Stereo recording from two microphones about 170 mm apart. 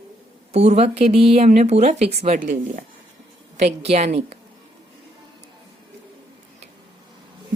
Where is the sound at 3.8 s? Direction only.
40° right (ahead or behind).